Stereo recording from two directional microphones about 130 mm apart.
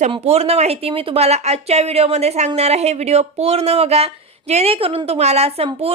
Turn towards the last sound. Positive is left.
turn(degrees=-50)  # may be behind; listen again after turning